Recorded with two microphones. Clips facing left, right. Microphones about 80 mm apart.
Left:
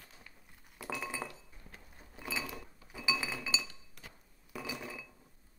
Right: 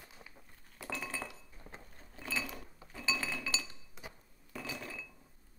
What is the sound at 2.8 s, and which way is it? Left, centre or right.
Chink, centre.